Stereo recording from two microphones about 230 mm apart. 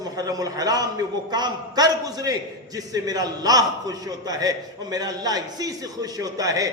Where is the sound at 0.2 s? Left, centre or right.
Centre.